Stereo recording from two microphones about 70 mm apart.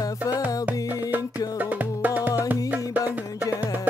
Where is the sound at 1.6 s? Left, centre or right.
Right.